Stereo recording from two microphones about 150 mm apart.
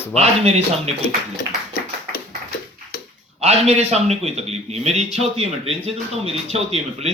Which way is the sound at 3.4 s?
45° right (ahead or behind).